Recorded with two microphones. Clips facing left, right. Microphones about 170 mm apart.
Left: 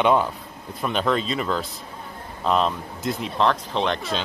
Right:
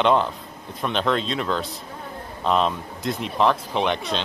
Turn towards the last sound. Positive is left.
turn(degrees=0)  # may be behind; listen again after turning